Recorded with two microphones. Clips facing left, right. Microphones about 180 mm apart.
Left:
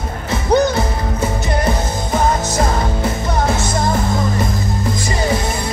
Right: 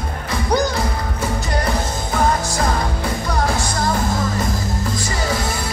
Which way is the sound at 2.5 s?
25° left (ahead or behind).